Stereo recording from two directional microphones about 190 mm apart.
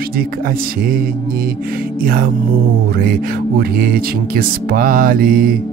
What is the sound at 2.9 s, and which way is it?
Speech, 50° right (ahead or behind).